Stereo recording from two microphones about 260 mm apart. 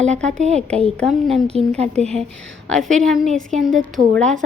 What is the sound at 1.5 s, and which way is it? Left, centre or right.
Speech, right.